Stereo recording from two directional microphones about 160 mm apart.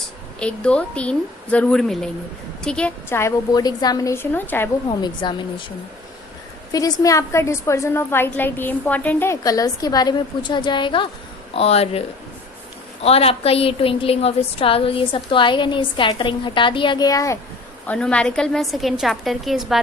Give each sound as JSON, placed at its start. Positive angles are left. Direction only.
{"t": 0.3, "sound": "a woman's voice", "side_deg": 5}
{"t": 4.9, "sound": "a woman's voice", "side_deg": 30}
{"t": 6.7, "sound": "a woman's voice", "side_deg": 20}
{"t": 17.8, "sound": "a woman's voice", "side_deg": 5}